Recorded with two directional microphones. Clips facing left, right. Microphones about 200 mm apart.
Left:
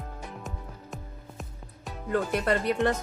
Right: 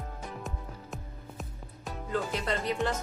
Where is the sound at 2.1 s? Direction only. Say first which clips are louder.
Left 6 dB; 60° left (ahead or behind).